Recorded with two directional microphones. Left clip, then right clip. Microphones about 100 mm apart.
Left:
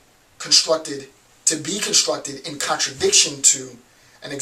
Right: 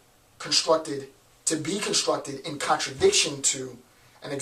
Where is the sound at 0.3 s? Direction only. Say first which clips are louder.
Left 8 dB; 10° right (ahead or behind).